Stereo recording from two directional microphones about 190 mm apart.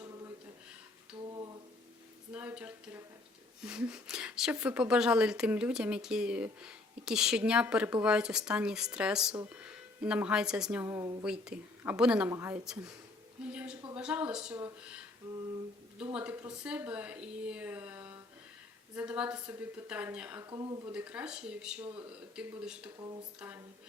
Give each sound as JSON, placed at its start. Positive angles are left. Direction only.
{"t": 1.3, "sound": "a sound", "side_deg": -20}
{"t": 2.3, "sound": "a woman's voice", "side_deg": -5}
{"t": 11.2, "sound": "a woman's voice", "side_deg": -5}
{"t": 16.1, "sound": "a woman's voice", "side_deg": -10}
{"t": 20.4, "sound": "speech", "side_deg": -20}
{"t": 20.8, "sound": "a woman's voice", "side_deg": -5}